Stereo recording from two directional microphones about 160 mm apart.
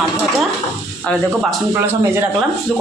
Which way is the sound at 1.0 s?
5° left (ahead or behind).